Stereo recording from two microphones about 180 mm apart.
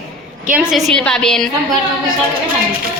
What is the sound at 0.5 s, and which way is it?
Speech, centre (ahead or behind).